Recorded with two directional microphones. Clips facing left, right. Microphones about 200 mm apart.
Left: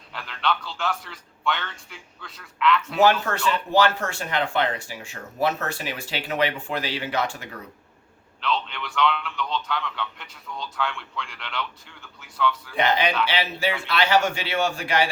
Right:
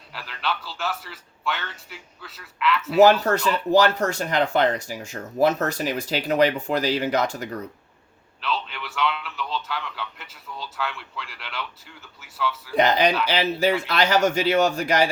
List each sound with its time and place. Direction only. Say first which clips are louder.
0.1 s a man's voice: left 2 dB; 5° right (ahead or behind)
3.0 s speech: right 5 dB; 40° right (ahead or behind)
8.4 s a man's voice: left 2 dB; 5° right (ahead or behind)
12.7 s speech: right 5 dB; 40° right (ahead or behind)